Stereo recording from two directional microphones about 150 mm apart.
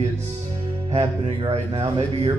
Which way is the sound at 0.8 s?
40° right (ahead or behind).